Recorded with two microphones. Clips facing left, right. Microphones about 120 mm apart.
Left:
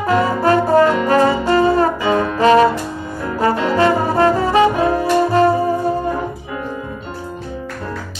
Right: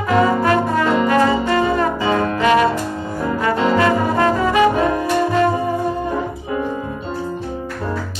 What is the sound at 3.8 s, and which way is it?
Brass instrument, 30° left (ahead or behind).